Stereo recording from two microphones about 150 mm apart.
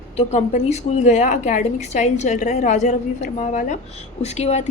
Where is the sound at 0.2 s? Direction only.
50° left (ahead or behind).